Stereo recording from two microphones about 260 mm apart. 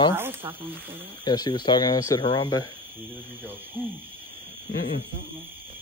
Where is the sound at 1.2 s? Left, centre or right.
Centre.